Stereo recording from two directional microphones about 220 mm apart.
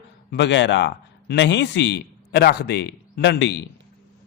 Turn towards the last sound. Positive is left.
turn(degrees=50)  # may be behind; listen again after turning